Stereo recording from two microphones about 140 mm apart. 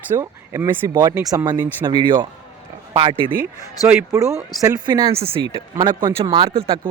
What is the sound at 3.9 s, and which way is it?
Speech, 20° right (ahead or behind).